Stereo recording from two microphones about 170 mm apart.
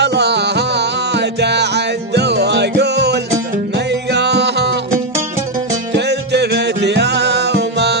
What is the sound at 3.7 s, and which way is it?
Music, 90° right.